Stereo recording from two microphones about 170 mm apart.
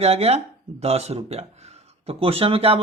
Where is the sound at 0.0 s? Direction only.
35° right (ahead or behind).